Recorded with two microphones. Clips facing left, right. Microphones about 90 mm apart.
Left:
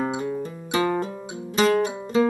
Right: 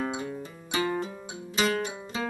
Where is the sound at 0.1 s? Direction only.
40° left (ahead or behind).